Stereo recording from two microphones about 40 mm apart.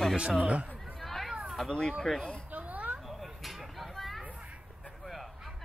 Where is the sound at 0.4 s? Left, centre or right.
Right.